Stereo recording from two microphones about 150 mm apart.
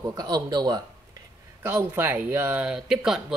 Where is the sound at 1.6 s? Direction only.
15° right (ahead or behind).